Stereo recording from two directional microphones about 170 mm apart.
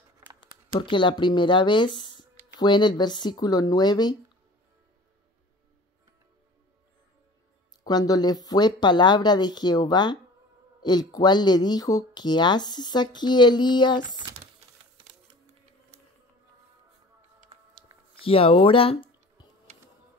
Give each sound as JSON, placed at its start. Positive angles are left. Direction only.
{"t": 0.7, "sound": "speech", "side_deg": 30}
{"t": 7.8, "sound": "speech", "side_deg": 25}
{"t": 14.0, "sound": "speech", "side_deg": -25}
{"t": 17.5, "sound": "a sound", "side_deg": -30}
{"t": 17.9, "sound": "a sound", "side_deg": -15}
{"t": 18.2, "sound": "speech", "side_deg": 35}